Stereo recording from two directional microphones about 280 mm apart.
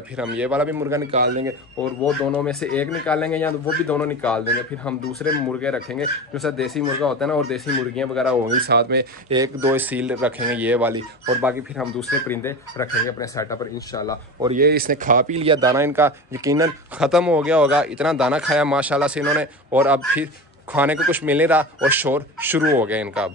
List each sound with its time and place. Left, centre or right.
0.2 s a man's voice: centre
2.3 s a man's voice: centre
8.5 s speech: right
9.3 s a man's voice: centre
14.5 s a man's voice: right; by 23.3 s centre